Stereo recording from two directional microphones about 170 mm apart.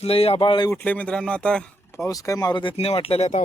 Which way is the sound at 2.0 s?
20° left (ahead or behind).